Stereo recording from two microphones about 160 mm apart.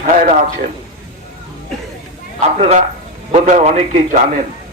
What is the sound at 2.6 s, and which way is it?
A man's voice, 45° right (ahead or behind).